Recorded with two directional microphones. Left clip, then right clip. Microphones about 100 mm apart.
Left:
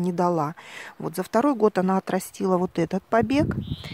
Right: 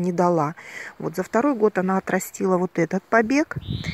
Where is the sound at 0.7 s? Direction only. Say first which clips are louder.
Right 2 dB; 35° left (ahead or behind).